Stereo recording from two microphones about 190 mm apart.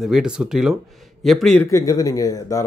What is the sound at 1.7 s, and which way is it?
Speech, 15° left (ahead or behind).